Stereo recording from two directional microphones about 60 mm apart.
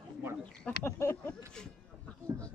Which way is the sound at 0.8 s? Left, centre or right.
Left.